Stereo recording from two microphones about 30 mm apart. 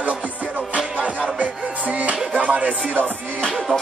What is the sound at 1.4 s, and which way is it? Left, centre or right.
Music, right.